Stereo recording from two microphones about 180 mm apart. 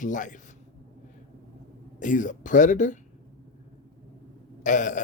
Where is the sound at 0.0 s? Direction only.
45° left (ahead or behind).